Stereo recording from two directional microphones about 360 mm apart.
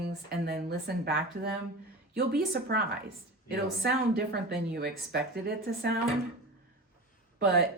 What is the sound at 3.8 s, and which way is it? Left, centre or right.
A woman's voice, right.